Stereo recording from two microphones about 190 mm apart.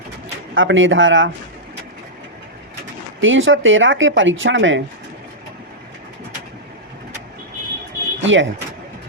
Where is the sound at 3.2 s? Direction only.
90° right.